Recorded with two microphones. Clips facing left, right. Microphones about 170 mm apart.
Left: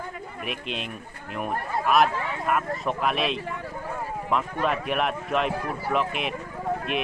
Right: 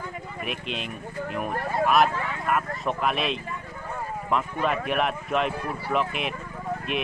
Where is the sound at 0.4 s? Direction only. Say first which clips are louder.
Even; centre (ahead or behind).